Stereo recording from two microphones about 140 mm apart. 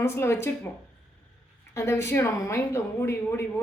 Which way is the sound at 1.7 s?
20° left (ahead or behind).